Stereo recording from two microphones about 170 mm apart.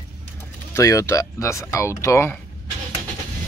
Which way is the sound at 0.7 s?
20° left (ahead or behind).